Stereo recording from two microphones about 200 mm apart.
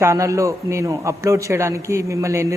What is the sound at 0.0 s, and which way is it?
Speech, 15° right (ahead or behind).